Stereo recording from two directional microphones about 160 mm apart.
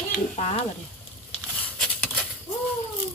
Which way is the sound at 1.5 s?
10° left (ahead or behind).